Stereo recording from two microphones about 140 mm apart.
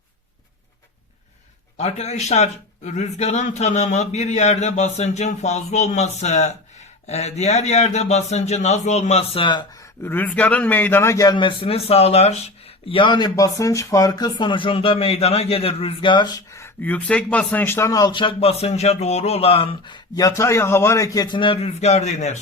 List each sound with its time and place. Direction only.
1.8 s speech: 50° left (ahead or behind); by 9.6 s 35° left (ahead or behind)
10.0 s a man's voice: 15° left (ahead or behind)
11.3 s speech: 40° left (ahead or behind); by 22.4 s 55° left (ahead or behind)